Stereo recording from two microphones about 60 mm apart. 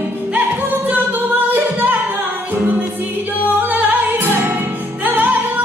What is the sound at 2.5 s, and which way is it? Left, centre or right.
Music, right.